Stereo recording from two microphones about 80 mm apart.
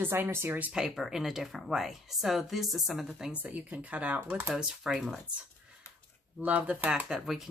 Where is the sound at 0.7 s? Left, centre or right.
Centre; by 4.6 s right.